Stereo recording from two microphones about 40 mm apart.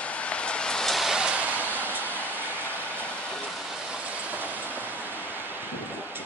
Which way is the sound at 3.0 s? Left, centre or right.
Left.